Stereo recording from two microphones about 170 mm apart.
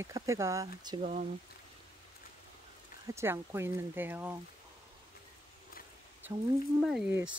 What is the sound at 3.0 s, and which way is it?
Speech, 15° right (ahead or behind).